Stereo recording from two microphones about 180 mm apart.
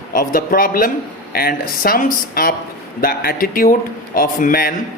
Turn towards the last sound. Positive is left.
turn(degrees=55)  # may be behind; listen again after turning